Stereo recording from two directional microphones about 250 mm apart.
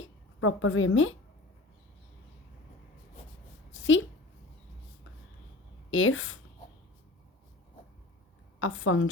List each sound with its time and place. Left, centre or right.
0.0 s a woman's voice: left
3.7 s a sound: left
5.9 s speech: left
8.5 s a woman's voice: left